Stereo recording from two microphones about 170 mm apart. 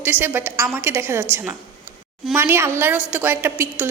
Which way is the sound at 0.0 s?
10° right (ahead or behind).